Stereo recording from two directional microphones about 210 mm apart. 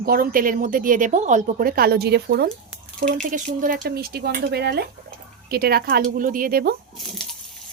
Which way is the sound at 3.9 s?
45° right (ahead or behind).